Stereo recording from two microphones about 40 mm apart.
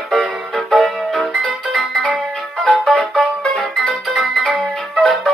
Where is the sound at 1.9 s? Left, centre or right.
Left.